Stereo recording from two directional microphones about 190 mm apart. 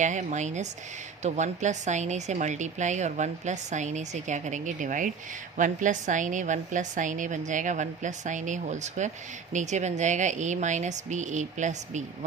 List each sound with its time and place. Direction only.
0.0 s a woman's voice: 40° right (ahead or behind)